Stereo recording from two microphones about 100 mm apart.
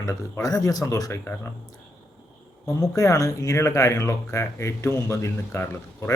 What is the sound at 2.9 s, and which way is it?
Speech, 35° left (ahead or behind).